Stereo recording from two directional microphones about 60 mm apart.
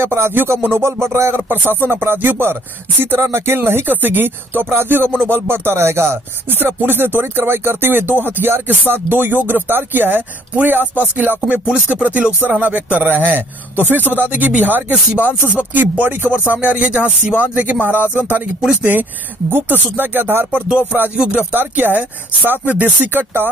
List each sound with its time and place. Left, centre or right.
0.0 s speech: right
1.5 s music: right
21.2 s music: centre
21.5 s music: right